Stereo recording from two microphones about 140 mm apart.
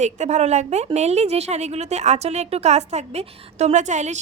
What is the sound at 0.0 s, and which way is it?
A woman's voice, 55° right (ahead or behind).